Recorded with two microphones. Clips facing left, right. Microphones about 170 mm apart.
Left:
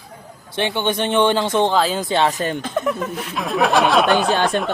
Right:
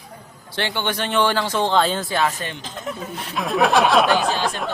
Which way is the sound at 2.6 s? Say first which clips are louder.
Left 9 dB; 65° left (ahead or behind).